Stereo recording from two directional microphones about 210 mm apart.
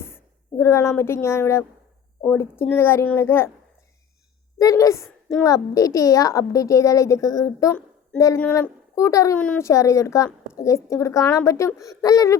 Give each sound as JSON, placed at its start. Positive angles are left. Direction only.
{"t": 0.0, "sound": "a woman's voice", "side_deg": 10}
{"t": 4.5, "sound": "a woman's voice", "side_deg": 15}